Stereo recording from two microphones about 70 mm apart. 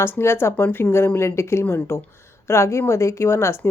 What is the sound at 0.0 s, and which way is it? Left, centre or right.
Speech, left.